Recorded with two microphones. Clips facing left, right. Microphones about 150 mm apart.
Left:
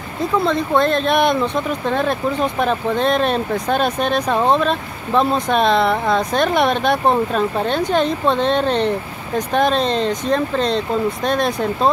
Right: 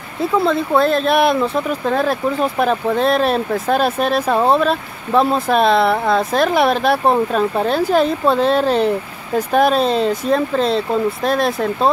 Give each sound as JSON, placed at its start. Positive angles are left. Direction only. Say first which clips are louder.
{"t": 0.2, "sound": "speech", "louder": "right 2 dB", "side_deg": -5}